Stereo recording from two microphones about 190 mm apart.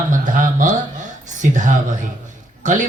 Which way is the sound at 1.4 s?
40° right (ahead or behind).